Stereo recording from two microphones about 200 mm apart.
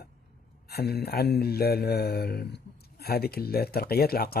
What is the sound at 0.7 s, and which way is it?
Speech, 50° left (ahead or behind).